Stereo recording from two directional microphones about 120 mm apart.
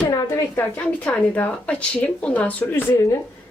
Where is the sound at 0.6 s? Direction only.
15° left (ahead or behind).